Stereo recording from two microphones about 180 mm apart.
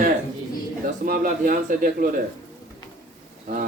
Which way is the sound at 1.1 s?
50° right (ahead or behind).